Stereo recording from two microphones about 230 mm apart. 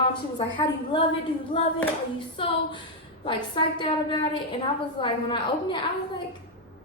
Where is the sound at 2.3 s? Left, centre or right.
Left.